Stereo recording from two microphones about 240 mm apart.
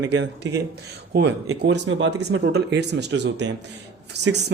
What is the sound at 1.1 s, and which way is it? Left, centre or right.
Speech, right.